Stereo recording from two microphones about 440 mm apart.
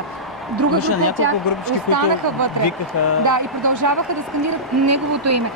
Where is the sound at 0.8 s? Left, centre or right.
Left.